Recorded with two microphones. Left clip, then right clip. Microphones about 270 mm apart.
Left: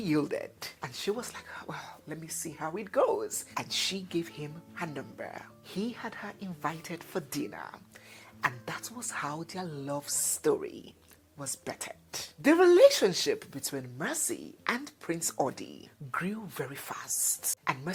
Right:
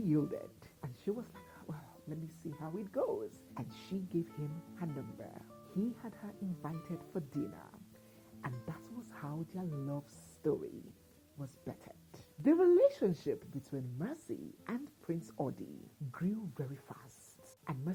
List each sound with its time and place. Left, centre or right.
0.1 s speech: centre